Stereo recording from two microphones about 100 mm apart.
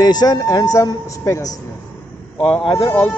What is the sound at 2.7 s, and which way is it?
Speech, 30° left (ahead or behind).